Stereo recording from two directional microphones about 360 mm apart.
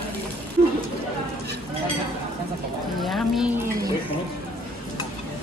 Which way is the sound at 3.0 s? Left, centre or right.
Centre.